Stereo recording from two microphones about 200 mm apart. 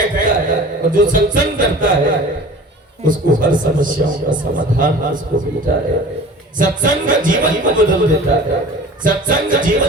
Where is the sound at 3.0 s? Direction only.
40° right (ahead or behind).